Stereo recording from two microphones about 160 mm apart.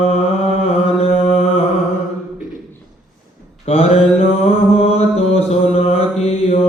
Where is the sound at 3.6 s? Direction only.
40° left (ahead or behind).